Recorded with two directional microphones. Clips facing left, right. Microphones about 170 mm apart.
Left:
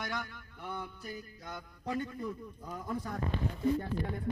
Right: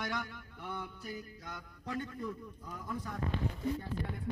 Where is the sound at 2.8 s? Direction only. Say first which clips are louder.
Left 2 dB; 35° left (ahead or behind).